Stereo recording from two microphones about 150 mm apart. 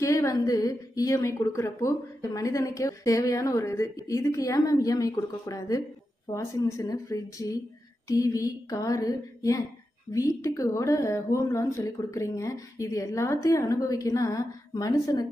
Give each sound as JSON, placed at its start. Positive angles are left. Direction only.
{"t": 0.0, "sound": "a woman's voice", "side_deg": 20}